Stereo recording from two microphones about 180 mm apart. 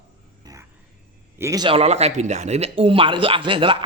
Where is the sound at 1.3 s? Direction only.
15° right (ahead or behind).